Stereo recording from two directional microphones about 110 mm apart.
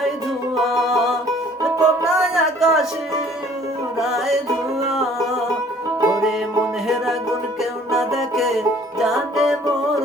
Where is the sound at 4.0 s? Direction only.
5° right (ahead or behind).